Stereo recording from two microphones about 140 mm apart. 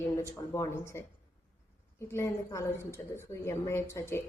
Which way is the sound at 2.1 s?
20° left (ahead or behind).